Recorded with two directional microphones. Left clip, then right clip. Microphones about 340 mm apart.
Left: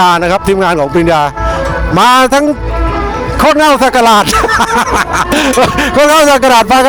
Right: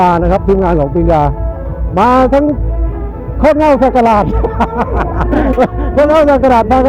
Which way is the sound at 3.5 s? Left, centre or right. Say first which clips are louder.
Left 1 dB; left.